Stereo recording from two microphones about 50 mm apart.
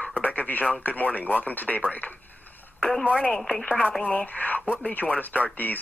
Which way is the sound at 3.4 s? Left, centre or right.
Centre.